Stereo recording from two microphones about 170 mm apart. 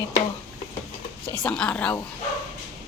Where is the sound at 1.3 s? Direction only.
5° left (ahead or behind).